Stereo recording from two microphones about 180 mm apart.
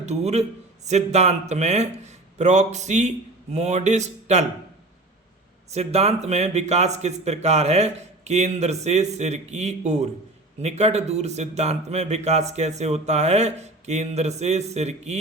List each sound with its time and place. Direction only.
0.0 s a man's voice: 35° right (ahead or behind)
5.7 s a man's voice: 35° right (ahead or behind)